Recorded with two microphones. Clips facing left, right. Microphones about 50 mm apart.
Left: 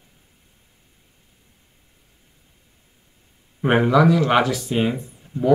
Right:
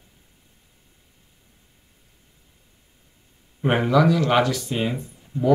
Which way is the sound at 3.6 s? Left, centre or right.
Centre.